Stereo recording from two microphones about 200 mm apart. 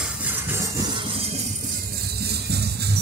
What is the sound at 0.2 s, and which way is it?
Music, 15° right (ahead or behind).